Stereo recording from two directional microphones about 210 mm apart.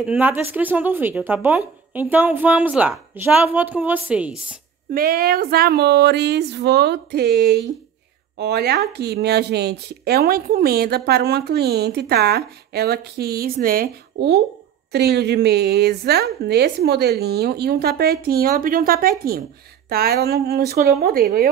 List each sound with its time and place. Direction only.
0.0 s speech: 5° right (ahead or behind)
4.9 s speech: 45° right (ahead or behind)